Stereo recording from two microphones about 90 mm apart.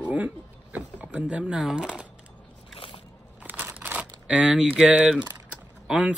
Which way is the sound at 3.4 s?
15° right (ahead or behind).